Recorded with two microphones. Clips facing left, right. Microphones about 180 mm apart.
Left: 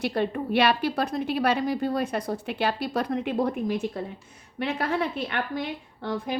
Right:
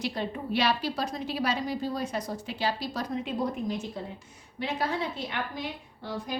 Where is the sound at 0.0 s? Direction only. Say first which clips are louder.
Left 6 dB; 60° left (ahead or behind).